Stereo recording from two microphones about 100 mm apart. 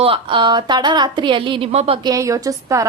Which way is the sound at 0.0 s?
60° right (ahead or behind).